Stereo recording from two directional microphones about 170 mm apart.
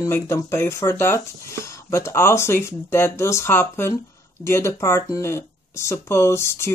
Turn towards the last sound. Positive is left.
turn(degrees=15)  # may be behind; listen again after turning